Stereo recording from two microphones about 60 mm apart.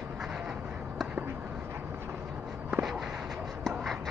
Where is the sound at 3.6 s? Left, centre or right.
Centre.